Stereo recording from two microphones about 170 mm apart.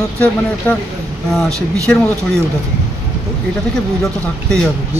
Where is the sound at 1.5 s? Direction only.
20° right (ahead or behind).